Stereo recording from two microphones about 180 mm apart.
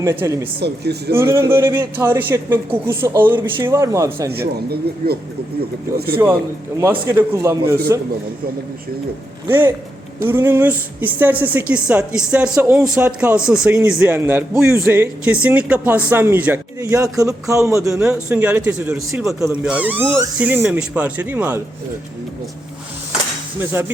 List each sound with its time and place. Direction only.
0.0 s speech: 15° right (ahead or behind)
0.6 s speech: 65° right (ahead or behind)
1.1 s speech: 15° right (ahead or behind)
4.3 s speech: 60° right (ahead or behind)
7.1 s speech: 10° right (ahead or behind)
9.5 s speech: 10° right (ahead or behind)
23.8 s speech: 15° right (ahead or behind)